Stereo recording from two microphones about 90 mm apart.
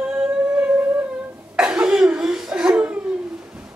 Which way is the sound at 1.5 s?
10° right (ahead or behind).